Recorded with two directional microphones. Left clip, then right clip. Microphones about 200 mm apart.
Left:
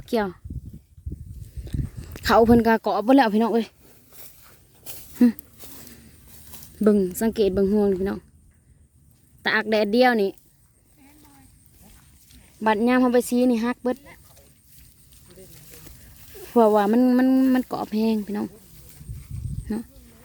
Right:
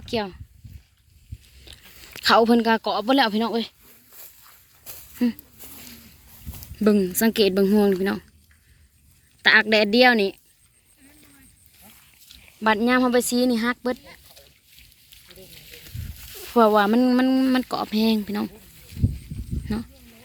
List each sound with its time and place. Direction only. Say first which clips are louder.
0.0 s speech: left 3 dB; 40° left (ahead or behind)
1.7 s a sound: left 8 dB; 35° left (ahead or behind)
2.2 s speech: even; 35° left (ahead or behind)
6.8 s a woman's voice: even; 20° left (ahead or behind)
9.4 s speech: right 5 dB; 20° left (ahead or behind)
12.5 s speech: even; 25° left (ahead or behind)
14.0 s a sound: right 2 dB; 50° left (ahead or behind)
16.3 s speech: even; 25° left (ahead or behind)
19.6 s speech: even; 20° left (ahead or behind)